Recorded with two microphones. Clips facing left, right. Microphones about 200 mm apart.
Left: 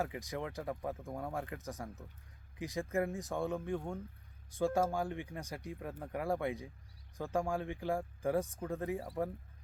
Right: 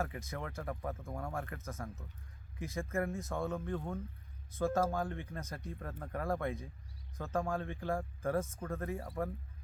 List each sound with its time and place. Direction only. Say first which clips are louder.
0.0 s speech: left 2 dB; 15° left (ahead or behind)